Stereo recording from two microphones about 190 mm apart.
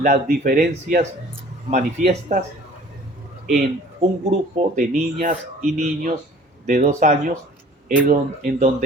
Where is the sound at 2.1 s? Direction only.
40° right (ahead or behind).